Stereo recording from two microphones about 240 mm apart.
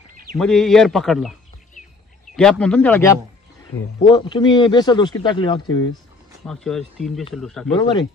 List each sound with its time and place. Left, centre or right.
0.4 s a man's voice: centre
2.3 s a man's voice: centre
6.4 s a man's voice: centre